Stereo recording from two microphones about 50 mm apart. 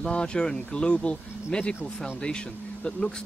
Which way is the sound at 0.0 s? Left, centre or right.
Centre.